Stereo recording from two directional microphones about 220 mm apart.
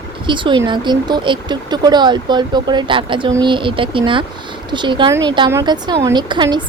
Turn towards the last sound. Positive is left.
turn(degrees=-20)  # may be behind; listen again after turning